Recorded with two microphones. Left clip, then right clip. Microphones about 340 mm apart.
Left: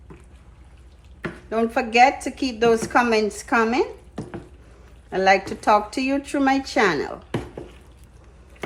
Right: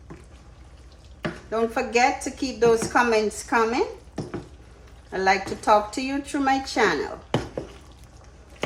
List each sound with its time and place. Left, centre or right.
1.5 s a woman's voice: left
5.1 s a woman's voice: left